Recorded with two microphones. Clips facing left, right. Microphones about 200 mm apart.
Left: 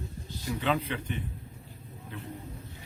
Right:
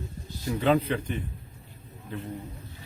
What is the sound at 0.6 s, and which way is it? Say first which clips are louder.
Speech: right 7 dB; 40° right (ahead or behind).